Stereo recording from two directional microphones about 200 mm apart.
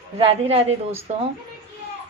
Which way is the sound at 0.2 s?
30° right (ahead or behind).